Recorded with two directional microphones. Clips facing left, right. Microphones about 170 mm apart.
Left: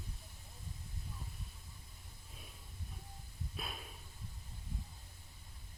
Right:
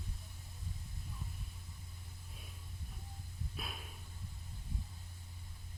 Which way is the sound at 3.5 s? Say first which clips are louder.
Left 2 dB; centre (ahead or behind).